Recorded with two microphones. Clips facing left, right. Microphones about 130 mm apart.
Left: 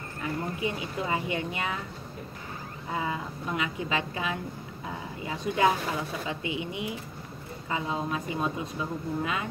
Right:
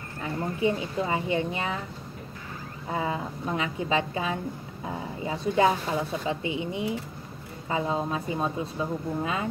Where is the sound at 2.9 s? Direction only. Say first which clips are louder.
Right 3 dB; 30° right (ahead or behind).